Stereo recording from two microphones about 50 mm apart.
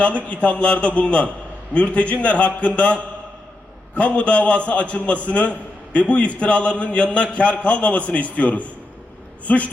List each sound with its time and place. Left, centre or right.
0.3 s a man's voice: left